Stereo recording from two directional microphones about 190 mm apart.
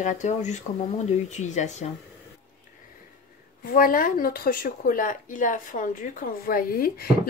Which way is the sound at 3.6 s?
45° left (ahead or behind).